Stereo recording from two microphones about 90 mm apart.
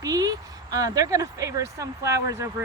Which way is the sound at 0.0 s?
45° right (ahead or behind).